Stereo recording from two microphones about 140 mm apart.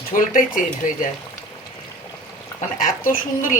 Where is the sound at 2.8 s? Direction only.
75° left (ahead or behind).